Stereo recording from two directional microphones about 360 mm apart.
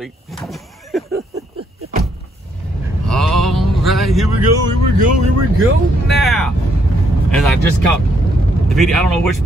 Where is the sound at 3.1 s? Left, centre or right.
Centre.